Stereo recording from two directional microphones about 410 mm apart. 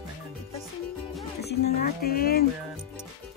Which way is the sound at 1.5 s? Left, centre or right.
Left.